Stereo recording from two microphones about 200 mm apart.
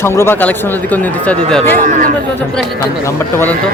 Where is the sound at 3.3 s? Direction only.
10° left (ahead or behind).